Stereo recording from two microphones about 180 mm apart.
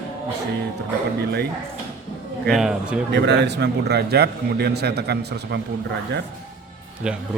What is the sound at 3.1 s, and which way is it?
A man's voice, 70° right (ahead or behind).